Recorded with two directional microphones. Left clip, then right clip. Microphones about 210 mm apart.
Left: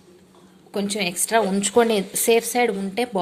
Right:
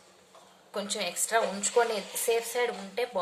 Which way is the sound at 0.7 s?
35° left (ahead or behind).